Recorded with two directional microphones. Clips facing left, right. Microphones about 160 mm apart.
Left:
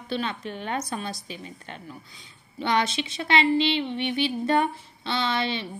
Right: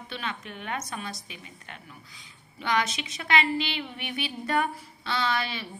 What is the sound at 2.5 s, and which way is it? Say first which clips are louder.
A woman's voice: left 3 dB; 30° left (ahead or behind).